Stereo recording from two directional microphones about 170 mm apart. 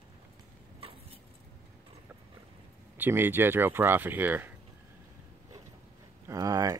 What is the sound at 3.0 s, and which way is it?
Speech, 10° right (ahead or behind).